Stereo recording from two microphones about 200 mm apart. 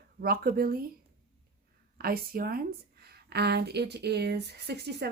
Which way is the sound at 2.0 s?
50° right (ahead or behind).